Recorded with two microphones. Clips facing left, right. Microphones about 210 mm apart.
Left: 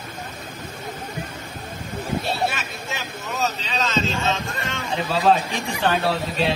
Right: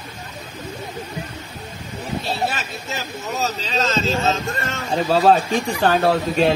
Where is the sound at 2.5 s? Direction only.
40° right (ahead or behind).